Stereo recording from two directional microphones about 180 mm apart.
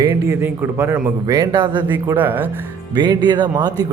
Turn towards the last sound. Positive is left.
turn(degrees=-25)  # may be behind; listen again after turning